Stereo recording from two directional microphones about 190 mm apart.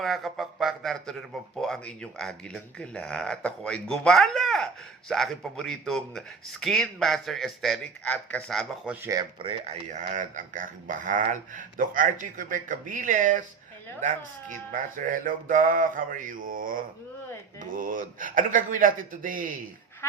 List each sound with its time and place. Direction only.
0.0 s speech: centre (ahead or behind)
9.0 s speech: 15° right (ahead or behind)
9.4 s speech: 35° right (ahead or behind)
14.7 s speech: 45° right (ahead or behind)